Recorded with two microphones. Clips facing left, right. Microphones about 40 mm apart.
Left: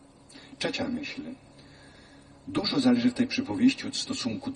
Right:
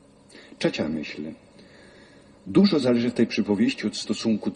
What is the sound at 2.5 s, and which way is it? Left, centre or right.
Speech, right.